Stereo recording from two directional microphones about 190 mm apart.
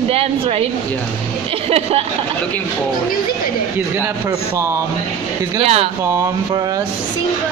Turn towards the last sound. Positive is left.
turn(degrees=-30)  # may be behind; listen again after turning